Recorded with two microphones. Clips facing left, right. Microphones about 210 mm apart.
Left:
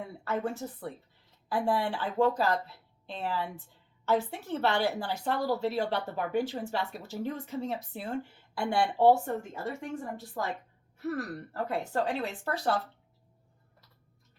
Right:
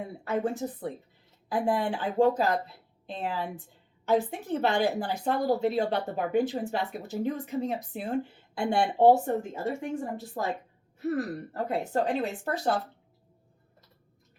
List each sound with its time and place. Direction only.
0.3 s a woman's voice: 15° right (ahead or behind)